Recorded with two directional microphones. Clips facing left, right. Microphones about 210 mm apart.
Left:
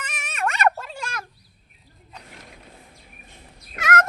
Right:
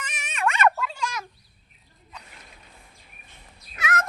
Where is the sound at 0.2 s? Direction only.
45° left (ahead or behind).